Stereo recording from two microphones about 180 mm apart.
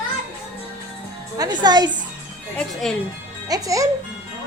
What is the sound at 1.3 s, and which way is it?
Speech, 20° right (ahead or behind).